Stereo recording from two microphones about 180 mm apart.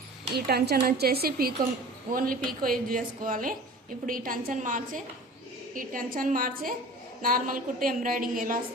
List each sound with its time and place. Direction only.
0.3 s a woman's voice: 65° right (ahead or behind)